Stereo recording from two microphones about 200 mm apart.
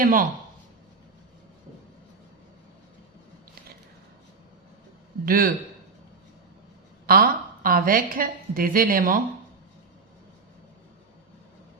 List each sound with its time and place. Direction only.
0.0 s a woman's voice: 45° right (ahead or behind)
5.2 s a woman's voice: 45° right (ahead or behind)
7.1 s a woman's voice: 45° right (ahead or behind)